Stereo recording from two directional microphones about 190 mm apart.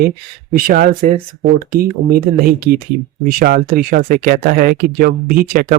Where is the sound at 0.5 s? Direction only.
50° right (ahead or behind).